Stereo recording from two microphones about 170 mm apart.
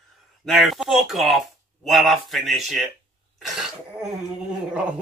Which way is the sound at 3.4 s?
Centre (ahead or behind).